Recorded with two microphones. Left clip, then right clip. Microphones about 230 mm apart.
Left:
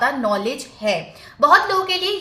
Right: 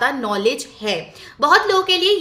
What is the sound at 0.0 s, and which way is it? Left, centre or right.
A woman's voice, right.